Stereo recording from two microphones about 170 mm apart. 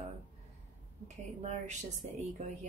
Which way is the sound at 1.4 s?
45° right (ahead or behind).